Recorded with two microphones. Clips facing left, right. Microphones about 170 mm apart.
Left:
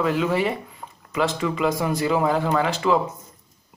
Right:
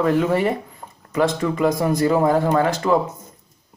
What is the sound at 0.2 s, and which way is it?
Speech, 50° right (ahead or behind).